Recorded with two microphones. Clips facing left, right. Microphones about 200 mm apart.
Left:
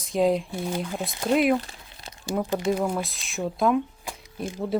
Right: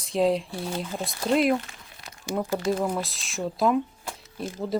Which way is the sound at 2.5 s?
15° left (ahead or behind).